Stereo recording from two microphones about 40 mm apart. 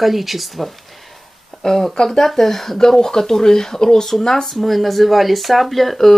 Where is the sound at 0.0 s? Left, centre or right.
Centre.